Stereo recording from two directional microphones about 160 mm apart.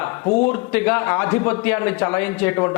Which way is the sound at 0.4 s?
10° left (ahead or behind).